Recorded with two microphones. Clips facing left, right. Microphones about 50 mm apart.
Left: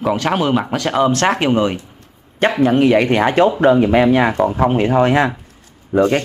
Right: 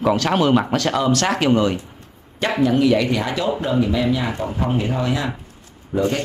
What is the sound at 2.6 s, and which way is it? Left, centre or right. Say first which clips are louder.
Speech: left 3 dB; left.